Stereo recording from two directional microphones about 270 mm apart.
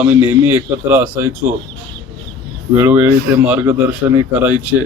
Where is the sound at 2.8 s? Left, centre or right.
Centre.